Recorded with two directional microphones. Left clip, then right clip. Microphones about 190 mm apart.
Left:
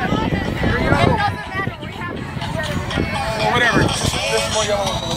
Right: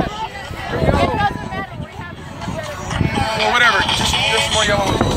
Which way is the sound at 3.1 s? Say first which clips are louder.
Right 3 dB; 35° left (ahead or behind).